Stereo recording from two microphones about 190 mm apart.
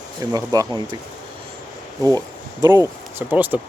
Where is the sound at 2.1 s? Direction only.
20° right (ahead or behind).